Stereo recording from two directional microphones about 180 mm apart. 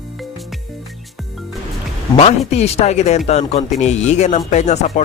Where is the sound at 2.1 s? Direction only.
35° left (ahead or behind).